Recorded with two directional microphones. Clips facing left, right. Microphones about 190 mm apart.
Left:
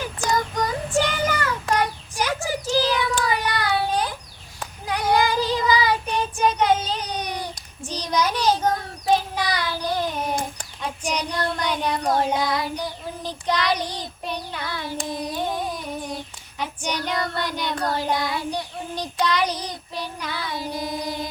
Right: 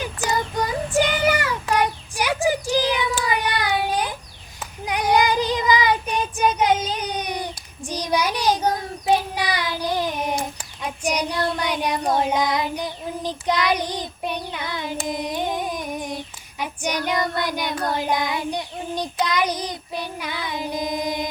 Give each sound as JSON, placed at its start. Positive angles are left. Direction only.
{"t": 0.2, "sound": "child singing", "side_deg": -10}
{"t": 15.0, "sound": "humming", "side_deg": -15}
{"t": 16.6, "sound": "child singing", "side_deg": -10}